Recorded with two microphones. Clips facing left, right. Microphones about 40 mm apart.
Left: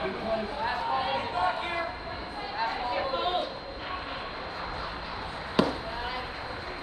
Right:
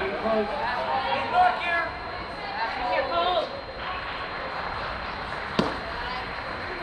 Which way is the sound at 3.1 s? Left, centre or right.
Right.